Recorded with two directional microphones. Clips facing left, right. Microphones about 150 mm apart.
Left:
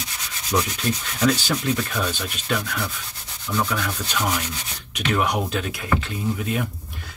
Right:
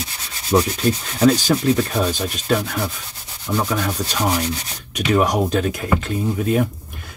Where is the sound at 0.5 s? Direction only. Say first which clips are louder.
Right 6 dB; 30° right (ahead or behind).